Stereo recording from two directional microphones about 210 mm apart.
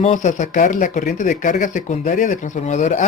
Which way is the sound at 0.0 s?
35° left (ahead or behind).